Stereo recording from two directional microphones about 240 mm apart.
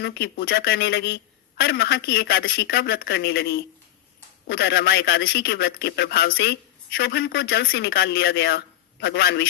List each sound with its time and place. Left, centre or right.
0.0 s a man's voice: left